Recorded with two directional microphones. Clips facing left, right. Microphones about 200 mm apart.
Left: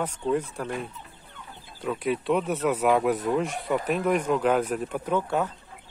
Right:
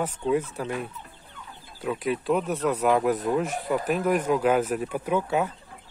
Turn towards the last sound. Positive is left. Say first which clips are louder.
# right 1 dB
turn(degrees=-10)  # may be behind; listen again after turning